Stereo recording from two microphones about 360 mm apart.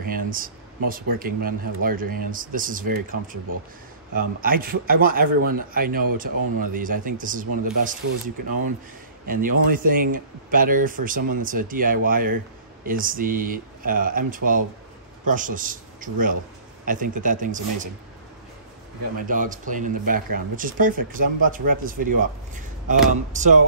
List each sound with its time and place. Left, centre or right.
0.0 s a sound: right
1.2 s speech: right
9.3 s a man's voice: right
19.1 s speech: right